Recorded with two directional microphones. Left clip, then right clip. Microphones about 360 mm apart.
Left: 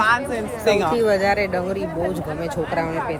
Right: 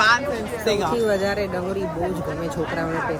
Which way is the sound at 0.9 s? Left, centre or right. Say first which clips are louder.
Left 3 dB; centre.